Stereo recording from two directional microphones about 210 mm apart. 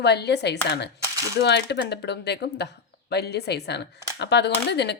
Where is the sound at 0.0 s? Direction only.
50° left (ahead or behind).